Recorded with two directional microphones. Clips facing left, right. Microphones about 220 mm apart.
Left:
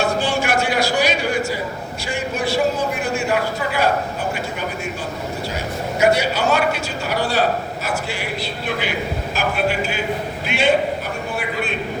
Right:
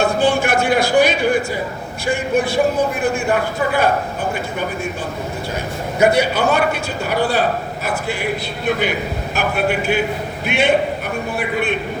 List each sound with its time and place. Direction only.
0.0 s a sound: 55° right (ahead or behind)
2.0 s a man's voice: 55° right (ahead or behind)
6.0 s a man's voice: 55° right (ahead or behind)
10.4 s a man's voice: 60° right (ahead or behind)